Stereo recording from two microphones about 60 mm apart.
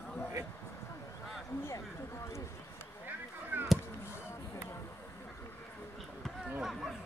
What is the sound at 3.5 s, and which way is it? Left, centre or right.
Chop, right.